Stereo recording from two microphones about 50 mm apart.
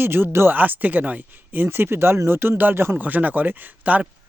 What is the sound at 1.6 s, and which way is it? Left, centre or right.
Speech, right.